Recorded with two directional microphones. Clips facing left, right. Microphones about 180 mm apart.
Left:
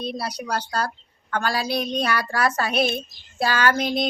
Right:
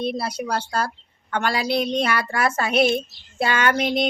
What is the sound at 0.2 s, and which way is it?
Speech, 25° right (ahead or behind).